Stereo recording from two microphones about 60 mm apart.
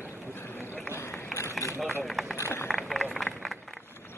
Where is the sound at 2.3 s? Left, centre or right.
Left.